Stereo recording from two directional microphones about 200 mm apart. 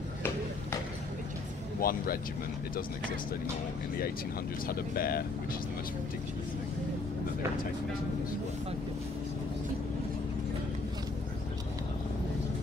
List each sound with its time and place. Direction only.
1.8 s speech: 45° left (ahead or behind)
4.6 s speech: 50° left (ahead or behind)